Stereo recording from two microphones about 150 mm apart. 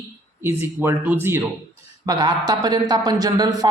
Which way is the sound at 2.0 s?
25° right (ahead or behind).